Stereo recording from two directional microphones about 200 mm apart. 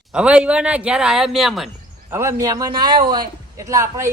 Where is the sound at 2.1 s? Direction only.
15° right (ahead or behind).